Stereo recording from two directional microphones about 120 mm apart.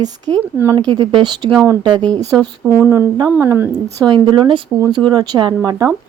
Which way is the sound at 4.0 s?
40° right (ahead or behind).